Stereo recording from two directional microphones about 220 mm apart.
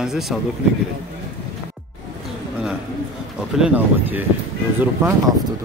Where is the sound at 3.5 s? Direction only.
5° right (ahead or behind).